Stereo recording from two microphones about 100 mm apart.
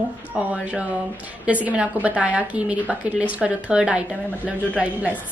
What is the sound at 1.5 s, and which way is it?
A woman's voice, 15° right (ahead or behind).